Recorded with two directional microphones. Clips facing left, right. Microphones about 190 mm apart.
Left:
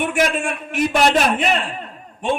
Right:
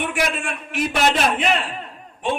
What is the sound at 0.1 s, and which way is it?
Speech, 45° left (ahead or behind).